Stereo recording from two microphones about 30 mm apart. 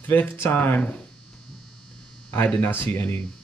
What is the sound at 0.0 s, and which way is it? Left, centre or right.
Speech, left.